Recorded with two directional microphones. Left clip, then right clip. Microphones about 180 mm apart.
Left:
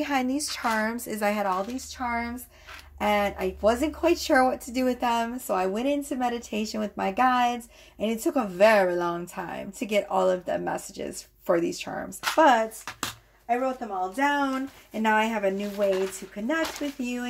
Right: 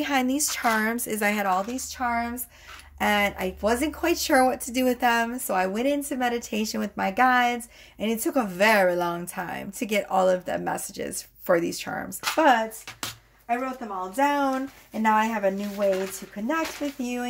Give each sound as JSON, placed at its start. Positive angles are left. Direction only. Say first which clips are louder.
{"t": 0.0, "sound": "a woman's voice", "louder": "right 2 dB", "side_deg": -30}
{"t": 13.7, "sound": "speech", "louder": "right 2 dB", "side_deg": -20}